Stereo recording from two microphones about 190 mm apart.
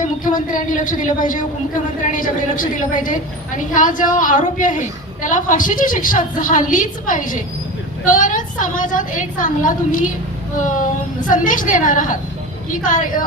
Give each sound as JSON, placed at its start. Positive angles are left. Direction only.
{"t": 0.0, "sound": "a woman's voice", "side_deg": 45}